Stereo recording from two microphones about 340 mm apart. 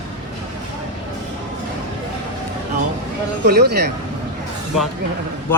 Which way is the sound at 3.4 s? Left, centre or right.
Right.